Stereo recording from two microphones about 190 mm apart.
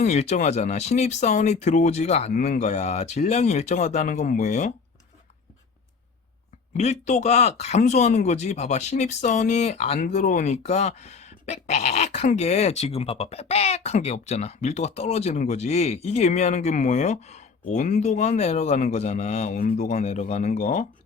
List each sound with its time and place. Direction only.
0.0 s speech: 35° left (ahead or behind)
6.7 s speech: 35° left (ahead or behind)
19.8 s speech: 35° left (ahead or behind)